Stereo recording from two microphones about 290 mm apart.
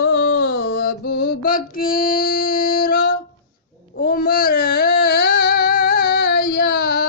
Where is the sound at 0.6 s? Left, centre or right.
Left.